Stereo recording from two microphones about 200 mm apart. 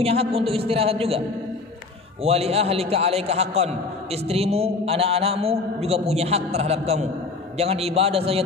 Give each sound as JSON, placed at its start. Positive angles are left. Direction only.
{"t": 0.0, "sound": "a woman's voice", "side_deg": -30}
{"t": 2.2, "sound": "a man's voice", "side_deg": -30}